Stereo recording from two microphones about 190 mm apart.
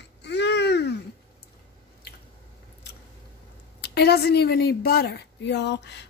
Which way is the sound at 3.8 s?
60° left (ahead or behind).